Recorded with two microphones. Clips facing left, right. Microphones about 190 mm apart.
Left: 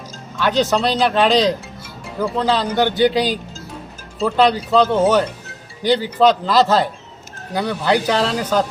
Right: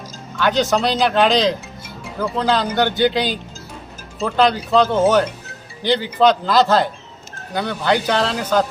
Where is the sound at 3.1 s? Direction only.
35° left (ahead or behind).